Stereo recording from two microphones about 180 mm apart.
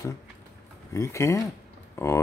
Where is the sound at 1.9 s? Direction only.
15° left (ahead or behind).